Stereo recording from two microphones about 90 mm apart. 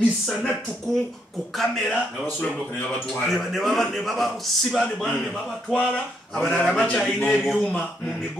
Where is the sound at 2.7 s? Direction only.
20° left (ahead or behind).